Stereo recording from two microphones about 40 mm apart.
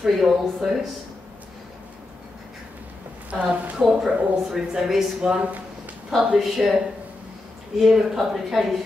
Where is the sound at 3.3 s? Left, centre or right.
Right.